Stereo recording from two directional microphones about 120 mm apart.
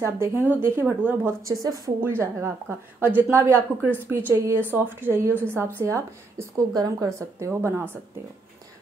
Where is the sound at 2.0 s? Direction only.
20° right (ahead or behind).